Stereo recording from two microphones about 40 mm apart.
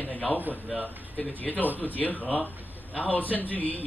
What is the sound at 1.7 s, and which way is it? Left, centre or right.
A man's voice, left.